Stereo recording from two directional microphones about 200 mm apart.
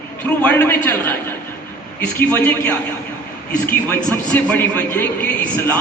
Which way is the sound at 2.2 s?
10° left (ahead or behind).